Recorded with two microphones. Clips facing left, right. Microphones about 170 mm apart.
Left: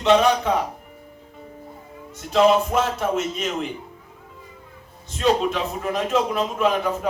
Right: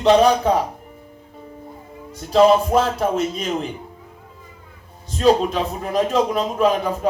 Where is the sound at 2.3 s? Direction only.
35° right (ahead or behind).